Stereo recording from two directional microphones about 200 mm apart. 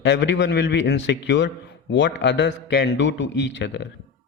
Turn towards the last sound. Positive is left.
turn(degrees=65)  # may be behind; listen again after turning